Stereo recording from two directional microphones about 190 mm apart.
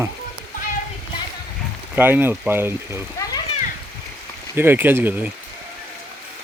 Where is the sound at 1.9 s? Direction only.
10° right (ahead or behind).